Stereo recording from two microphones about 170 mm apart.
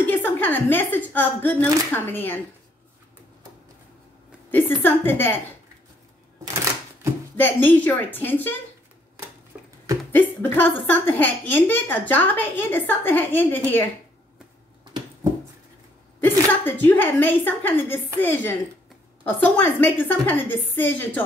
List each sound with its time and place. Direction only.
0.0 s a woman's voice: 10° left (ahead or behind)
4.8 s a woman's voice: 10° left (ahead or behind)
6.4 s a sound: 20° right (ahead or behind)
7.3 s a woman's voice: 10° left (ahead or behind)
9.5 s a sound: 10° right (ahead or behind)
10.1 s a woman's voice: 10° left (ahead or behind)
16.2 s a woman's voice: 10° left (ahead or behind)